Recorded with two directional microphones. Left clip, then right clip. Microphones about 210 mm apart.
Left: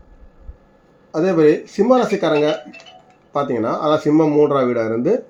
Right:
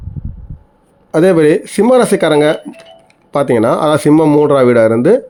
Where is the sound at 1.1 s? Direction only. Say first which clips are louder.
Right 6 dB; 50° right (ahead or behind).